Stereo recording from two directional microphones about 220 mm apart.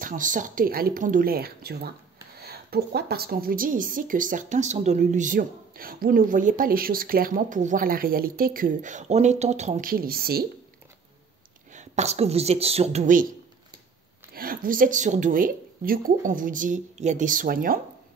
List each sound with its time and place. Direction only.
0.0 s a woman's voice: 35° right (ahead or behind)
11.7 s speech: 30° right (ahead or behind)
14.3 s a woman's voice: 40° right (ahead or behind)